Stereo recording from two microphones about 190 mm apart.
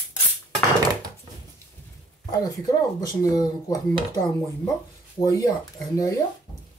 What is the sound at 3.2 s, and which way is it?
Speech, 20° left (ahead or behind).